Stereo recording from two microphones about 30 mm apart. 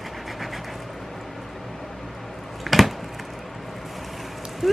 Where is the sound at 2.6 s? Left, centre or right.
Centre.